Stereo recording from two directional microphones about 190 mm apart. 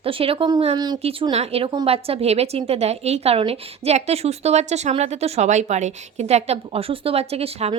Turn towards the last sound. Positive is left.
turn(degrees=-30)  # may be behind; listen again after turning